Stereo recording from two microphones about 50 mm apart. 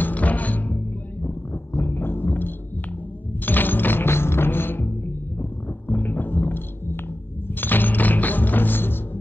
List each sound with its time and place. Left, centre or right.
0.0 s music: left
1.7 s music: left